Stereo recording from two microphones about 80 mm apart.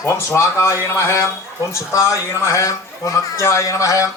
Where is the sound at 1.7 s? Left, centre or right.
Left.